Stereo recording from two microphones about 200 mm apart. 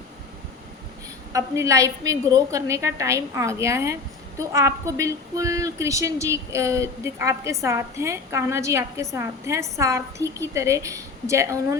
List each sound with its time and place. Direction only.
1.3 s speech: 15° right (ahead or behind)